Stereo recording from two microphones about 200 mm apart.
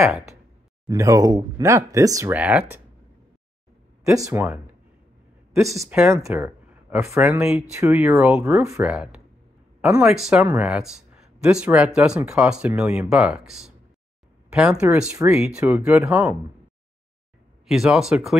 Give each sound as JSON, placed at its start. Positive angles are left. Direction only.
{"t": 0.8, "sound": "speech", "side_deg": -15}
{"t": 4.3, "sound": "speech", "side_deg": -10}
{"t": 5.8, "sound": "speech", "side_deg": -5}
{"t": 6.0, "sound": "speech", "side_deg": -15}
{"t": 17.6, "sound": "speech", "side_deg": 0}